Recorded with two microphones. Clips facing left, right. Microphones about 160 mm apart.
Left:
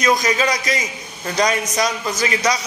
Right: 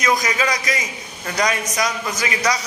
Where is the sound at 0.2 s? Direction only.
25° left (ahead or behind).